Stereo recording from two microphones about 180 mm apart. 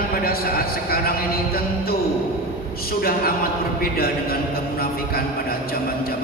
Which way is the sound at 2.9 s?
55° left (ahead or behind).